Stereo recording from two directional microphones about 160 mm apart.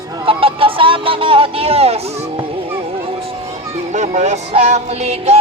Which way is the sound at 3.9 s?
45° right (ahead or behind).